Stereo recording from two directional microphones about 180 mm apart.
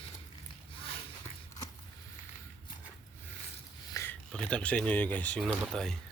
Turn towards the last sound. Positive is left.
turn(degrees=0)  # may be behind; listen again after turning